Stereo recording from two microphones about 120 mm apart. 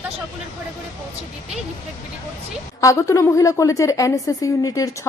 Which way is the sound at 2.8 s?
25° left (ahead or behind).